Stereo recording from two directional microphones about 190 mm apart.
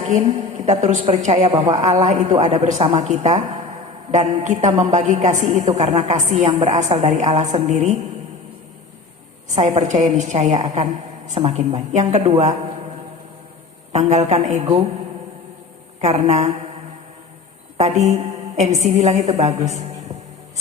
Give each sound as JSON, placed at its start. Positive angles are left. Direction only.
{"t": 0.1, "sound": "a woman's voice", "side_deg": -35}
{"t": 1.5, "sound": "a woman's voice", "side_deg": -25}
{"t": 1.7, "sound": "a woman's voice", "side_deg": -35}
{"t": 9.7, "sound": "a woman's voice", "side_deg": -35}
{"t": 13.9, "sound": "a woman's voice", "side_deg": -35}
{"t": 16.0, "sound": "a woman's voice", "side_deg": -35}
{"t": 17.7, "sound": "a woman's voice", "side_deg": -35}